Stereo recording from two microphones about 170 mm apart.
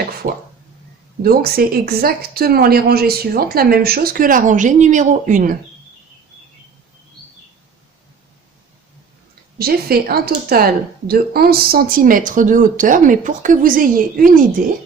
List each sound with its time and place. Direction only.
0.2 s speech: 50° right (ahead or behind)
1.2 s speech: 60° right (ahead or behind)
9.6 s speech: 65° right (ahead or behind)